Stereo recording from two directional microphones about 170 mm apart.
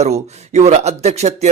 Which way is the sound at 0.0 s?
40° right (ahead or behind).